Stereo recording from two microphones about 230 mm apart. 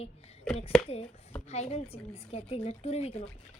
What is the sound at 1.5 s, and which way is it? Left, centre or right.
A woman's voice, left.